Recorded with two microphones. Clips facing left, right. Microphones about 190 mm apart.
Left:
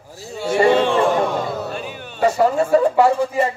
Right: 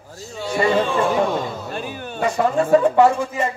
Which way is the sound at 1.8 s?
45° right (ahead or behind).